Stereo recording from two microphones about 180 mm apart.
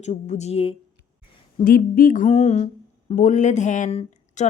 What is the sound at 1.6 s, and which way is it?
Speech, 50° left (ahead or behind).